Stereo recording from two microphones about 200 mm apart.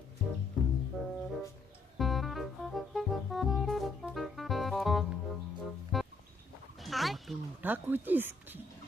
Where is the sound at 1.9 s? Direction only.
Centre (ahead or behind).